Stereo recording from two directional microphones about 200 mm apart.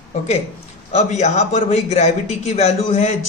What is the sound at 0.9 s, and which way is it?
A man's voice, 35° left (ahead or behind).